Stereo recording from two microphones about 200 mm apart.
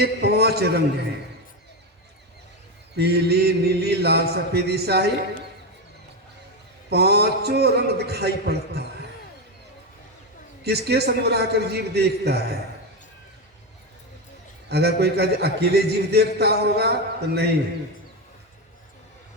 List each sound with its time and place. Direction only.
0.0 s a man's voice: 55° right (ahead or behind)
2.9 s mantra: 55° right (ahead or behind)
6.9 s mantra: 55° right (ahead or behind)
10.6 s mantra: 55° right (ahead or behind)
14.7 s a man's voice: 55° right (ahead or behind)